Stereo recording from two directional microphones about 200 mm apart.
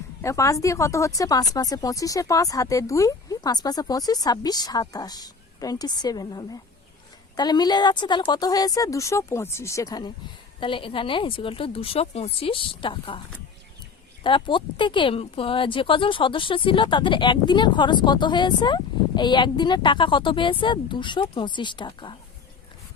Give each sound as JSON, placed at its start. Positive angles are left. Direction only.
{"t": 0.2, "sound": "speech", "side_deg": 15}
{"t": 14.3, "sound": "speech", "side_deg": 25}